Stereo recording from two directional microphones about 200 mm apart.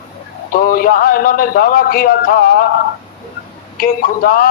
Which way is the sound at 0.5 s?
45° left (ahead or behind).